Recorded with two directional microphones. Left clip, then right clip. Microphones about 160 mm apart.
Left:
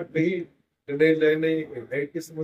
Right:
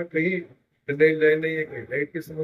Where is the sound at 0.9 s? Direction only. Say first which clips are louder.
Right 1 dB; 20° left (ahead or behind).